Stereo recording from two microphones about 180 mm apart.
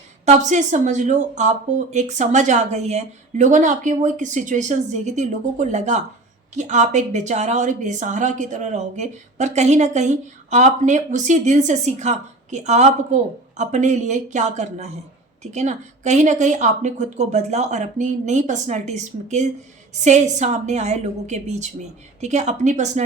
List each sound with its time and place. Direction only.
0.3 s a woman's voice: 40° right (ahead or behind)